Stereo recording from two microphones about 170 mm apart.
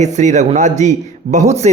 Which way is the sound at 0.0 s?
45° right (ahead or behind).